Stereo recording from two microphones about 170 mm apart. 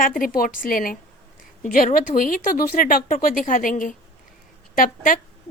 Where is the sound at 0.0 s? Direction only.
55° left (ahead or behind).